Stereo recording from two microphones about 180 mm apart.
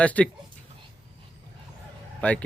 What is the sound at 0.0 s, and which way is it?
Speech, 5° left (ahead or behind).